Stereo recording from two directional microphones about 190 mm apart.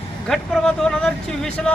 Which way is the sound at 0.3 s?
5° left (ahead or behind).